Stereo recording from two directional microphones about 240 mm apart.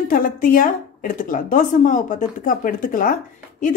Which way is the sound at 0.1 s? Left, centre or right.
Left.